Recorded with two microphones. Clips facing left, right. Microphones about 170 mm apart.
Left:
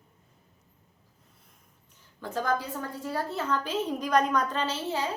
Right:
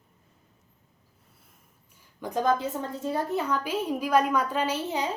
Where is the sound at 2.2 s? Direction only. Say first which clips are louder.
Right 4 dB; 15° right (ahead or behind).